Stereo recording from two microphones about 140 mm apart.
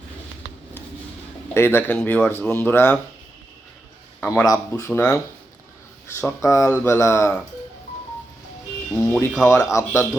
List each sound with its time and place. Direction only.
1.5 s speech: 15° left (ahead or behind)
4.2 s speech: 15° left (ahead or behind)
6.4 s speech: 20° left (ahead or behind)
9.0 s speech: 15° left (ahead or behind)